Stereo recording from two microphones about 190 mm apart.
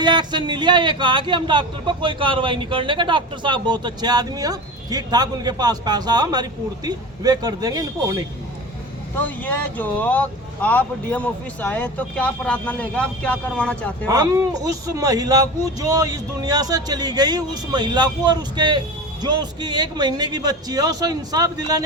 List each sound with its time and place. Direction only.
0.0 s speech: 25° right (ahead or behind)
9.1 s speech: 10° left (ahead or behind)
14.1 s speech: 15° right (ahead or behind)